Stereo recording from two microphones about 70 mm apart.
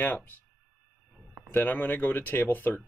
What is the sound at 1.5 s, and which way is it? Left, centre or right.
Speech, left.